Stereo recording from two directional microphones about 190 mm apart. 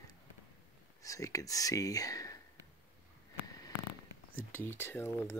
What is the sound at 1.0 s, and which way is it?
Speech, 15° left (ahead or behind).